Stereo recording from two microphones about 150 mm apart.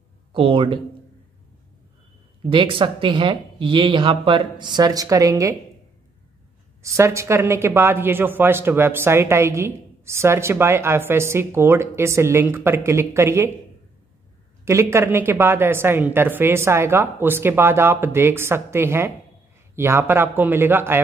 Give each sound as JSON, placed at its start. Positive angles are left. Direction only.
{"t": 0.3, "sound": "speech", "side_deg": -35}
{"t": 2.5, "sound": "speech", "side_deg": -35}
{"t": 6.8, "sound": "speech", "side_deg": -20}
{"t": 14.6, "sound": "speech", "side_deg": -20}